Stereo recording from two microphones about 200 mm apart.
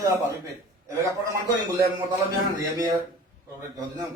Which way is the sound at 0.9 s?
15° right (ahead or behind).